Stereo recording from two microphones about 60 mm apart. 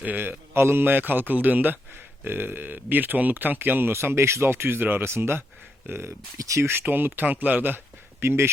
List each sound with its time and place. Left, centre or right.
0.0 s a man's voice: right
5.1 s speech: right
6.8 s a man's voice: right
8.2 s speech: right